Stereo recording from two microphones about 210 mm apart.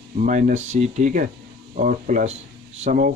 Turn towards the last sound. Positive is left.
turn(degrees=-40)  # may be behind; listen again after turning